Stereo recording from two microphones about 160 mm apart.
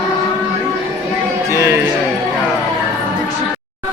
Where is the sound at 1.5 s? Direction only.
15° right (ahead or behind).